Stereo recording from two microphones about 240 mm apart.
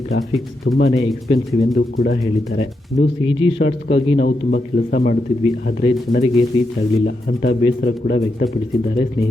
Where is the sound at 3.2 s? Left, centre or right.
Left.